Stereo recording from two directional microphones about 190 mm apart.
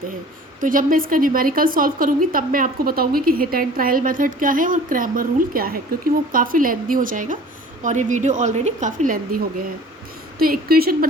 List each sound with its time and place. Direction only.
0.6 s a woman's voice: 45° right (ahead or behind)